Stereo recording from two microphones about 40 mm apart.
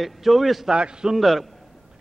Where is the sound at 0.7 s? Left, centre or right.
Centre.